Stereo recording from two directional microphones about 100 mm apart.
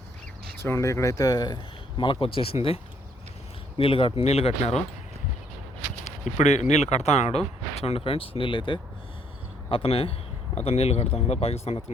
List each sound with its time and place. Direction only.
0.6 s speech: 25° left (ahead or behind)
2.2 s speech: 70° left (ahead or behind); by 4.8 s 90° left
6.3 s speech: 90° left; by 8.8 s 55° left (ahead or behind)
9.6 s speech: 65° left (ahead or behind); by 11.8 s 90° left